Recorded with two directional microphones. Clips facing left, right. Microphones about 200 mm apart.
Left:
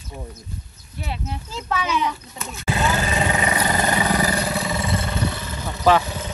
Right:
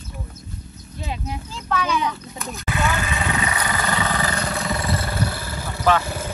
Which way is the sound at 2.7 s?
35° left (ahead or behind).